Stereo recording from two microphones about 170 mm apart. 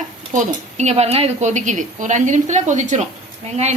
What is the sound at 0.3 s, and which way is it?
A woman's voice, 40° right (ahead or behind).